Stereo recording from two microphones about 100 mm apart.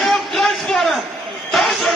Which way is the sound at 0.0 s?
5° left (ahead or behind).